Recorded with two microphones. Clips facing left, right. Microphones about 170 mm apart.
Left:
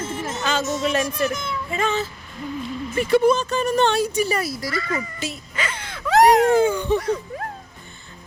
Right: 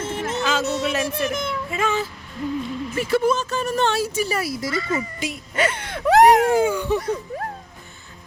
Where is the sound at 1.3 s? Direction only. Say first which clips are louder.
Right 2 dB; 55° right (ahead or behind).